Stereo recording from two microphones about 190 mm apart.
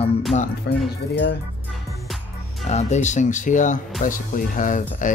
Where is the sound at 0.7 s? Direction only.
60° left (ahead or behind).